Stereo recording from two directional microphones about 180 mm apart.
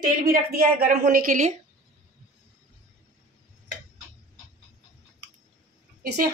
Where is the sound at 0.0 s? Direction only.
55° right (ahead or behind).